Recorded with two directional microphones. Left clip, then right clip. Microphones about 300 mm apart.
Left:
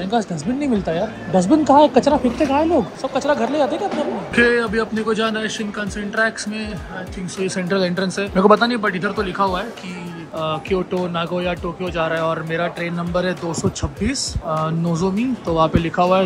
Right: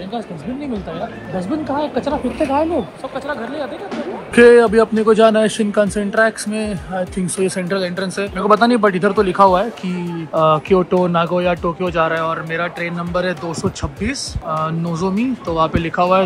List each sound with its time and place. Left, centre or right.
1.7 s speech: centre
3.9 s a man's voice: centre